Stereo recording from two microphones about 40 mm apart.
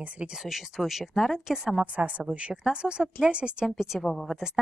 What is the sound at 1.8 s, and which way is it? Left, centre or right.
A woman's voice, right.